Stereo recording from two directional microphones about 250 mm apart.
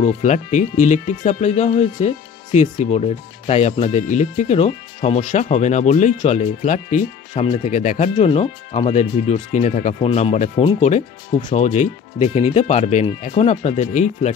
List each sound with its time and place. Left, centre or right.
0.0 s speech: left